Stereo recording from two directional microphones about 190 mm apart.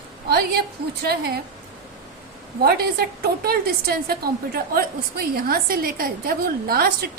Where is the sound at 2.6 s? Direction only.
55° right (ahead or behind).